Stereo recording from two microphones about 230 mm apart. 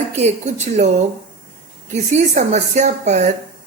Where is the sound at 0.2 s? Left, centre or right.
Right.